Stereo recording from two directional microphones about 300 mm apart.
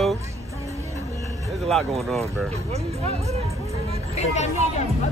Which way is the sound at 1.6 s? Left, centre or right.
Centre.